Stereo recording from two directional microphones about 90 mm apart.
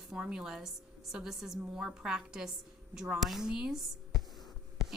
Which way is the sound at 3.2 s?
5° right (ahead or behind).